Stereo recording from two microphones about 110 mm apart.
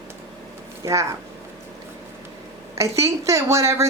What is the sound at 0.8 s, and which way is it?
Speech, 30° right (ahead or behind).